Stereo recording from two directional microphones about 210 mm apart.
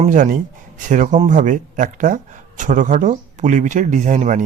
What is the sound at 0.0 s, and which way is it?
Speech, 40° right (ahead or behind).